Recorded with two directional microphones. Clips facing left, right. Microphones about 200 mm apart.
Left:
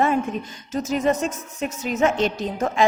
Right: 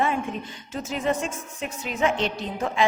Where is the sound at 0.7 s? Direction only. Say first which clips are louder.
Left 5 dB; 40° left (ahead or behind).